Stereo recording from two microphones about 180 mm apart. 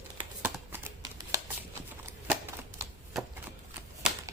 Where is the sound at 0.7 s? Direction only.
15° right (ahead or behind).